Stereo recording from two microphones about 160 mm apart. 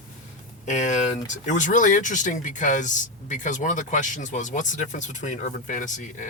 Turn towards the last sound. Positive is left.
turn(degrees=50)  # may be behind; listen again after turning